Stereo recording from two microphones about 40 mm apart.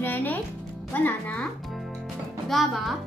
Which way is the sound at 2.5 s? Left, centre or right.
Centre.